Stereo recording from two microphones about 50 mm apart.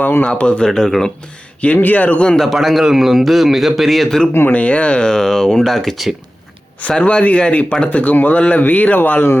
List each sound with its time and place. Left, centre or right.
0.3 s speech: left
0.6 s speech: centre
1.6 s speech: left
2.4 s a man's voice: centre
4.4 s speech: left; by 6.1 s centre
7.0 s speech: left
8.6 s speech: left